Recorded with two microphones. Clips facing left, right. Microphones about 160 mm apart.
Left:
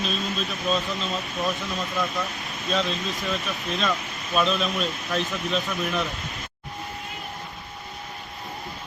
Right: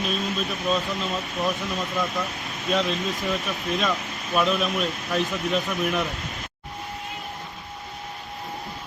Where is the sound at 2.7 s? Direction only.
15° right (ahead or behind).